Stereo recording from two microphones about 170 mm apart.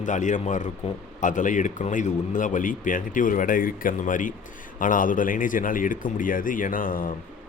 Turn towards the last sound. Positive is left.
turn(degrees=55)  # may be behind; listen again after turning